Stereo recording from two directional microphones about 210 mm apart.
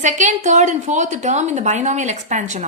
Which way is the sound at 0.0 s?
35° right (ahead or behind).